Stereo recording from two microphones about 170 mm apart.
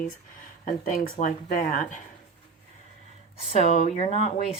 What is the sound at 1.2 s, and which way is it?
Speech, 50° left (ahead or behind).